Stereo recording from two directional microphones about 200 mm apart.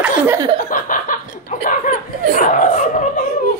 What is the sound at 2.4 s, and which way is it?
Speech, 40° left (ahead or behind).